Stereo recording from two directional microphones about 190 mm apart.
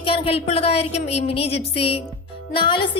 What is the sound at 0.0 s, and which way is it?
A woman's voice, 30° left (ahead or behind).